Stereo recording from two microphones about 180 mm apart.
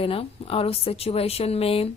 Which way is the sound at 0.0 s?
30° left (ahead or behind).